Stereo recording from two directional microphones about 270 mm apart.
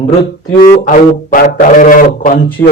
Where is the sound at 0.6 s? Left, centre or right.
Left.